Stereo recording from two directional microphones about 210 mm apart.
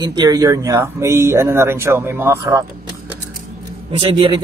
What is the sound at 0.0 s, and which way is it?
Speech, 20° right (ahead or behind).